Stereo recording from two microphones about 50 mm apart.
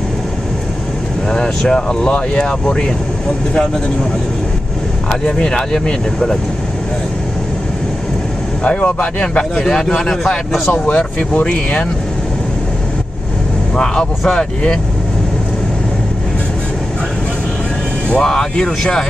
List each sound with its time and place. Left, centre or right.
1.3 s speech: centre
5.2 s speech: centre
8.6 s speech: left
9.2 s speech: centre
9.9 s speech: centre
10.7 s speech: left
13.7 s speech: centre
18.2 s speech: centre